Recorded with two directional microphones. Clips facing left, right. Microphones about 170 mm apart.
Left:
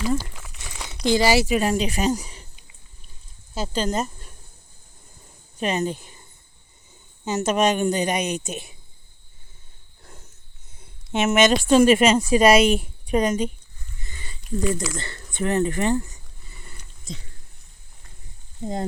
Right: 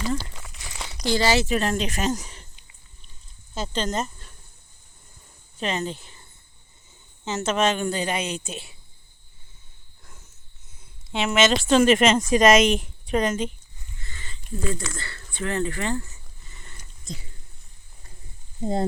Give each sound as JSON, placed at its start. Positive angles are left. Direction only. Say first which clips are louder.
{"t": 0.0, "sound": "crumpling", "louder": "left 3 dB", "side_deg": 5}
{"t": 1.0, "sound": "speech", "louder": "left 3 dB", "side_deg": 15}
{"t": 3.5, "sound": "speech", "louder": "left 2 dB", "side_deg": 10}
{"t": 5.5, "sound": "speech", "louder": "left 4 dB", "side_deg": 15}
{"t": 7.3, "sound": "speech", "louder": "left 2 dB", "side_deg": 15}
{"t": 10.0, "sound": "a sound", "louder": "left 5 dB", "side_deg": 35}
{"t": 11.2, "sound": "speech", "louder": "left 3 dB", "side_deg": 20}
{"t": 14.0, "sound": "a sound", "louder": "left 1 dB", "side_deg": 15}
{"t": 14.6, "sound": "speech", "louder": "left 4 dB", "side_deg": 5}
{"t": 14.9, "sound": "speech", "louder": "left 5 dB", "side_deg": 20}
{"t": 18.6, "sound": "speech", "louder": "right 3 dB", "side_deg": -35}